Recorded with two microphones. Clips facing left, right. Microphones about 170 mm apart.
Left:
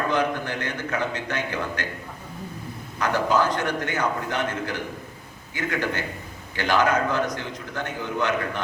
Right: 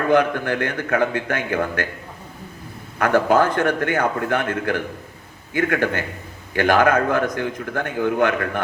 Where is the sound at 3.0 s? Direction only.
55° right (ahead or behind).